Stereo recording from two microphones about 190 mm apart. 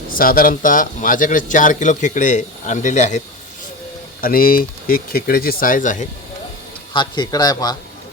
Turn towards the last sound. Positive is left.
turn(degrees=20)  # may be behind; listen again after turning